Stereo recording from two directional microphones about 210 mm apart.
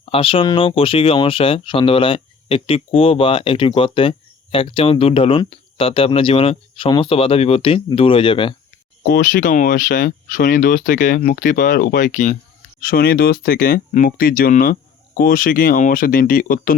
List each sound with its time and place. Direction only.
0.0 s speech: 25° left (ahead or behind)
9.0 s speech: 45° left (ahead or behind)